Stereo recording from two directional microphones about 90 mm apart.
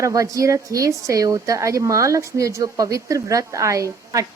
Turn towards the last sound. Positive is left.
turn(degrees=-35)  # may be behind; listen again after turning